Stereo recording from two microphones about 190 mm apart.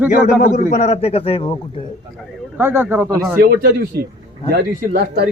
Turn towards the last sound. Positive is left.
turn(degrees=-55)  # may be behind; listen again after turning